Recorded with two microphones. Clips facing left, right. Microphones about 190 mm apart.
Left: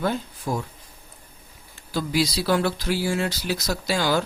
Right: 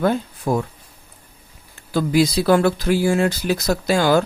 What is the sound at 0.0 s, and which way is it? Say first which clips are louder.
Speech: right 6 dB; 55° right (ahead or behind).